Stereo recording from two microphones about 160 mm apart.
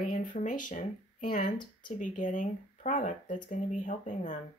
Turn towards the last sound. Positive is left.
turn(degrees=50)  # may be behind; listen again after turning